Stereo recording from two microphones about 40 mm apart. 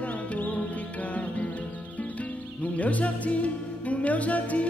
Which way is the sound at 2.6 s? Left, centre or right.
Left.